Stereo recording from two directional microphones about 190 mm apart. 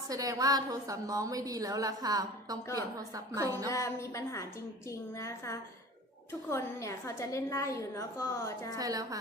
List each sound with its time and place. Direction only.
0.1 s a woman's voice: 20° right (ahead or behind)
3.7 s a woman's voice: 15° left (ahead or behind)
8.8 s a woman's voice: 20° right (ahead or behind)